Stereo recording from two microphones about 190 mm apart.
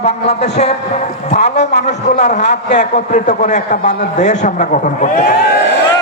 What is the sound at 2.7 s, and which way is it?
A man's voice, 40° left (ahead or behind).